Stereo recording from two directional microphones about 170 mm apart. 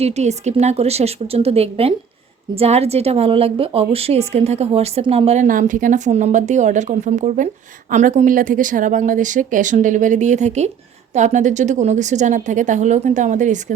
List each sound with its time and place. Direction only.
0.0 s a woman's voice: 40° right (ahead or behind)